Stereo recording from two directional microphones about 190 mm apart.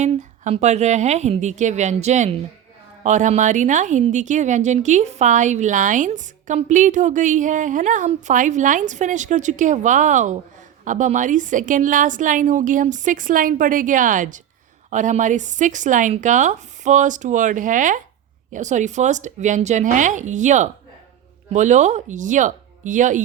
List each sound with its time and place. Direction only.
0.0 s a woman's voice: 40° right (ahead or behind)